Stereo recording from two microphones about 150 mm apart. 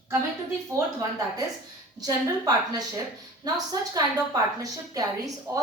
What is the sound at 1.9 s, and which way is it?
Speech, 25° right (ahead or behind).